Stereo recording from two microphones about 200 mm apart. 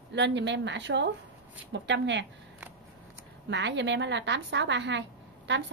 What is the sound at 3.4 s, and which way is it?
A woman's voice, 60° right (ahead or behind).